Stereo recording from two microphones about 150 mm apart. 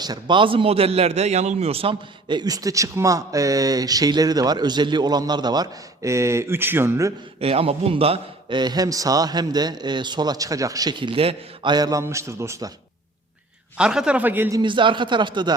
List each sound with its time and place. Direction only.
0.0 s a man's voice: 30° right (ahead or behind)
7.3 s a man's voice: 40° right (ahead or behind); by 12.7 s 20° right (ahead or behind)
13.7 s a man's voice: 5° right (ahead or behind)
14.6 s speech: 35° right (ahead or behind)